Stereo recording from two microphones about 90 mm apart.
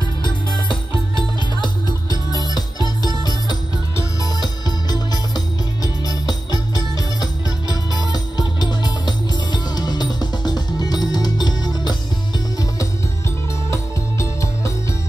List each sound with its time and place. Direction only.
0.2 s music: 60° left (ahead or behind)
4.4 s music: 45° left (ahead or behind)